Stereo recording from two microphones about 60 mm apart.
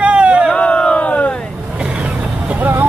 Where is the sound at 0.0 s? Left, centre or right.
Right.